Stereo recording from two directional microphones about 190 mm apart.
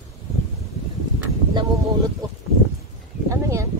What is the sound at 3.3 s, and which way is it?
Speech, 15° right (ahead or behind).